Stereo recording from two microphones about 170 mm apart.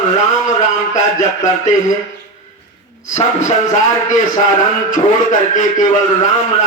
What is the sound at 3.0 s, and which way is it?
Speech, 45° left (ahead or behind).